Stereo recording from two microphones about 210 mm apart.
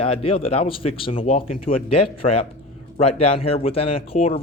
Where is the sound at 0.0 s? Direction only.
25° left (ahead or behind).